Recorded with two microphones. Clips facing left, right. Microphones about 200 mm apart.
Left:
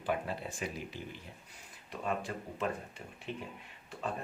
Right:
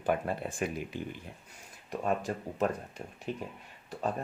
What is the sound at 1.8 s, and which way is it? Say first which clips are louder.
Speech: right 5 dB; 45° right (ahead or behind).